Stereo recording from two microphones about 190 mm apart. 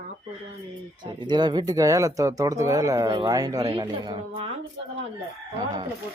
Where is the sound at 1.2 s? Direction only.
25° right (ahead or behind).